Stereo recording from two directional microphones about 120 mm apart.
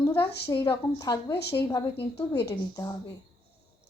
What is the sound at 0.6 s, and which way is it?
A woman's voice, 20° left (ahead or behind).